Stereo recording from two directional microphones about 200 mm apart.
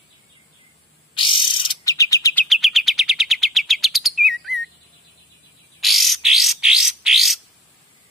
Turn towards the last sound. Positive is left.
turn(degrees=0)  # may be behind; listen again after turning